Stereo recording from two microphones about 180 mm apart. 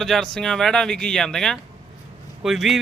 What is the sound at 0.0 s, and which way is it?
Speech, centre (ahead or behind).